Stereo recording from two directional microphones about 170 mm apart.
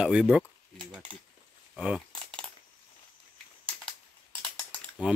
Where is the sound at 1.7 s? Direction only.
5° right (ahead or behind).